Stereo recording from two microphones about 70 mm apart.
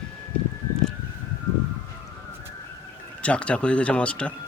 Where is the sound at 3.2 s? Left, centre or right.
Centre.